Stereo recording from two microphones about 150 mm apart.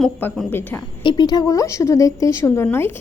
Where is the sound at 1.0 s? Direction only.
30° left (ahead or behind).